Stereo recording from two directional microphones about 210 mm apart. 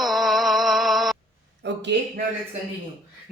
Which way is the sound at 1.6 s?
55° right (ahead or behind).